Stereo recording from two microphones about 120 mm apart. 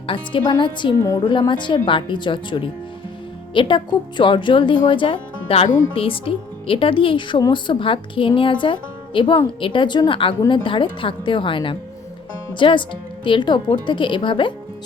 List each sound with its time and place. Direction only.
0.1 s a woman's voice: 40° left (ahead or behind)